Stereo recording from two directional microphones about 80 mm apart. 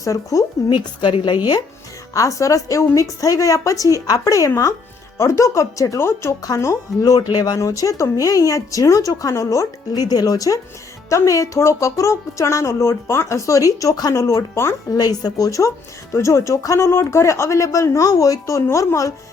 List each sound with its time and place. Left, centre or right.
0.0 s a woman's voice: left
0.7 s speech: left
2.1 s a woman's voice: left
6.0 s speech: left
6.4 s a woman's voice: left
7.0 s a woman's voice: left
9.9 s a woman's voice: left
14.9 s a woman's voice: left